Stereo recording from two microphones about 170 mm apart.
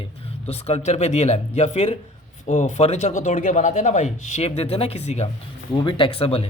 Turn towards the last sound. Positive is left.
turn(degrees=35)  # may be behind; listen again after turning